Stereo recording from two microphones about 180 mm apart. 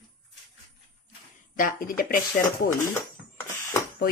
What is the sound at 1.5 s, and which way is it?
Speech, 50° left (ahead or behind).